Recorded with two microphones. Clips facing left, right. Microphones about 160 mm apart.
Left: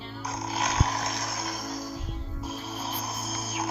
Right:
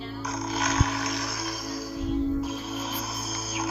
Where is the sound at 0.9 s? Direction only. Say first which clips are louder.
Right 2 dB; 45° left (ahead or behind).